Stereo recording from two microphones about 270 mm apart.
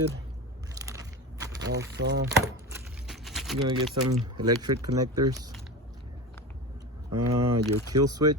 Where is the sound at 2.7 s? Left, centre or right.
Centre.